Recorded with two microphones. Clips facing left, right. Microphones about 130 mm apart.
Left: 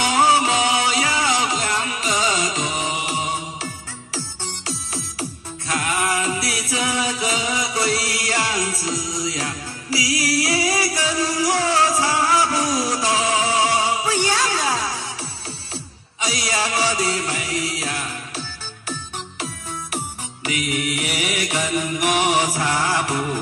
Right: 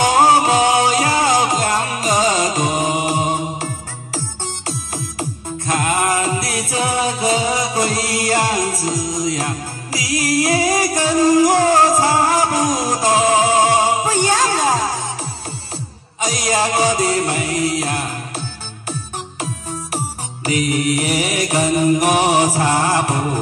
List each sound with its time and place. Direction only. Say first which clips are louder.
0.0 s music: right 5 dB; 45° right (ahead or behind)
5.7 s music: right 5 dB; 45° right (ahead or behind)
16.2 s music: right 5 dB; 40° right (ahead or behind)
20.4 s mantra: right 6 dB; 40° right (ahead or behind)